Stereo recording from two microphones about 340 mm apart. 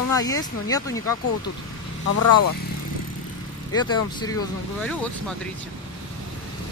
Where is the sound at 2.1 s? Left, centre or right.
Left.